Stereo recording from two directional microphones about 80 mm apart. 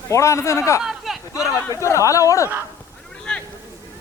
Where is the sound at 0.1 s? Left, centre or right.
Left.